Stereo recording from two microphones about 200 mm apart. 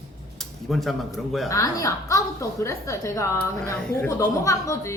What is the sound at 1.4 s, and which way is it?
A woman's voice, 15° left (ahead or behind).